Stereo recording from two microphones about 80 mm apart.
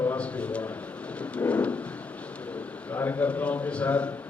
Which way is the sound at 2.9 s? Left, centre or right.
Left.